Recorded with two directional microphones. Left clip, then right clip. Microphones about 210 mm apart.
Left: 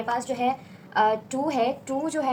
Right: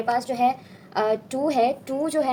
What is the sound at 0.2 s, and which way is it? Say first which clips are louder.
A woman's voice: right 4 dB; 40° right (ahead or behind).